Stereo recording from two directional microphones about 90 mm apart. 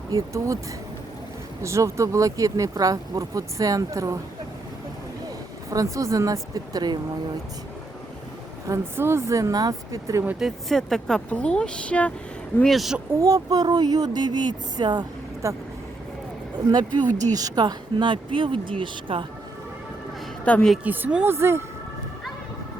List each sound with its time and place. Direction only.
0.1 s speech: 40° right (ahead or behind)
1.6 s speech: 35° right (ahead or behind)
5.7 s speech: 35° right (ahead or behind)
8.6 s speech: 30° right (ahead or behind)
10.4 s speech: centre (ahead or behind)
12.6 s speech: centre (ahead or behind)
13.1 s speech: 40° right (ahead or behind)
15.4 s speech: 35° right (ahead or behind)
17.0 s speech: 20° left (ahead or behind)
17.3 s a woman's voice: 45° right (ahead or behind); by 19.2 s 70° right (ahead or behind)
20.4 s a woman's voice: 15° left (ahead or behind)
20.8 s a woman's voice: 20° right (ahead or behind)
21.2 s speech: 30° right (ahead or behind)